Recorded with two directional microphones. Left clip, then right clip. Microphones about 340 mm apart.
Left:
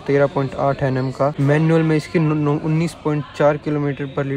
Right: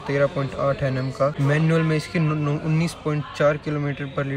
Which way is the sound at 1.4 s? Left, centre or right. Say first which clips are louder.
Left 5 dB; centre.